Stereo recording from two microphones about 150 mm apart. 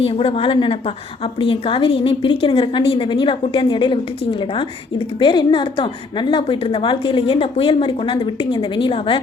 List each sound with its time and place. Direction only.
0.0 s a woman's voice: 40° left (ahead or behind)